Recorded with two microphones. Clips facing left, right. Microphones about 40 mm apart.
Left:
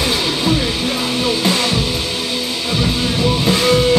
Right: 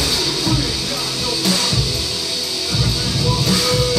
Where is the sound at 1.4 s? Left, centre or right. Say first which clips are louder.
Left 3 dB; left.